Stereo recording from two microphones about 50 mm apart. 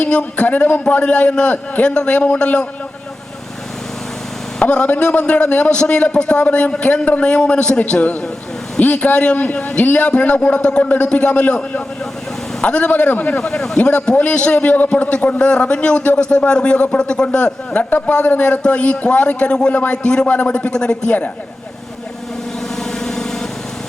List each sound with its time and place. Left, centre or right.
0.0 s a man's voice: left
4.6 s a man's voice: left
13.3 s a man's voice: centre
23.0 s vehicle: centre